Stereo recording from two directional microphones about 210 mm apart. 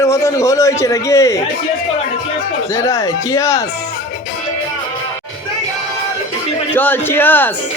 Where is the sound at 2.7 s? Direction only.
15° left (ahead or behind).